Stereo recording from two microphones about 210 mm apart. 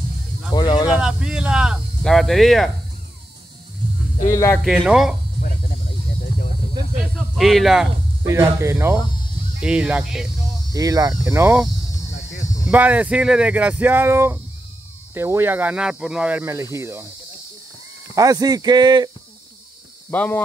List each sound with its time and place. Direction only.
0.6 s snake: 20° left (ahead or behind)
0.8 s speech: 5° right (ahead or behind)
4.3 s speech: 10° left (ahead or behind)
4.6 s speech: centre (ahead or behind)
7.2 s speech: centre (ahead or behind)
10.7 s speech: 15° right (ahead or behind)
12.6 s speech: 10° right (ahead or behind)
18.1 s speech: 15° right (ahead or behind)
20.1 s speech: 10° left (ahead or behind)